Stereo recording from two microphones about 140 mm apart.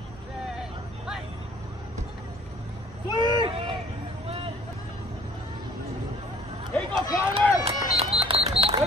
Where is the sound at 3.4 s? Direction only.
35° right (ahead or behind).